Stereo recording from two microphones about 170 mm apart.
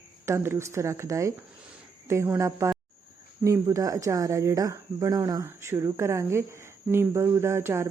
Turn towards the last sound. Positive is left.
turn(degrees=-15)  # may be behind; listen again after turning